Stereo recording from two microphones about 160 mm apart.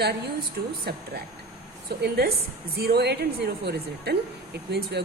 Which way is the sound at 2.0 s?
85° right.